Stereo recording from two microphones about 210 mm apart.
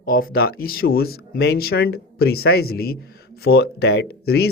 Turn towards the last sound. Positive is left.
turn(degrees=50)  # may be behind; listen again after turning